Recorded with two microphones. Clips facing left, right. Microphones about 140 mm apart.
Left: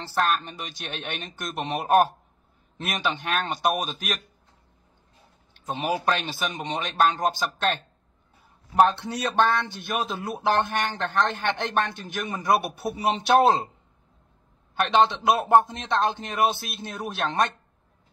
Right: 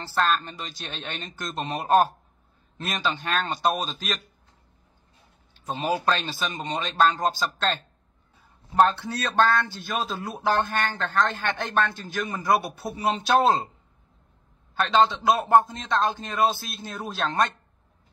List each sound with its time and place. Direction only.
0.0 s speech: 10° left (ahead or behind)
5.7 s speech: 15° left (ahead or behind)
8.7 s speech: 15° left (ahead or behind)
14.8 s speech: 20° left (ahead or behind)